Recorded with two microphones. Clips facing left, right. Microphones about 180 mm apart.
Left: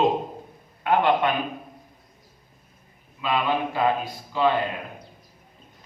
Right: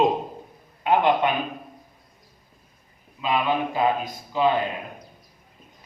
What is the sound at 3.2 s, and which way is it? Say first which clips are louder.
Speech: right 1 dB; 15° right (ahead or behind).